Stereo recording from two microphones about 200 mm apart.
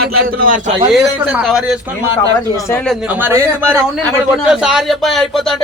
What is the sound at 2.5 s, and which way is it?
Speech, 10° left (ahead or behind).